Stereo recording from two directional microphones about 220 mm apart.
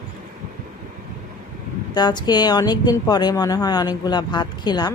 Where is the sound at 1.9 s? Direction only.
20° left (ahead or behind).